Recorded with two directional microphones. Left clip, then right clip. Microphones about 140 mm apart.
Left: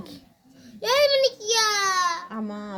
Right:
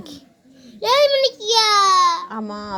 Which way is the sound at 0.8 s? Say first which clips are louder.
Right 4 dB; 15° left (ahead or behind).